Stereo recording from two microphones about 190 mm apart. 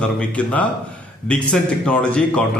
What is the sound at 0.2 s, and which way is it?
A man's voice, 5° left (ahead or behind).